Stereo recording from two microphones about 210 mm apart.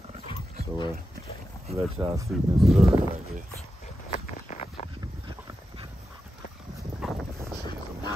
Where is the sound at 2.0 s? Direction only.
15° right (ahead or behind).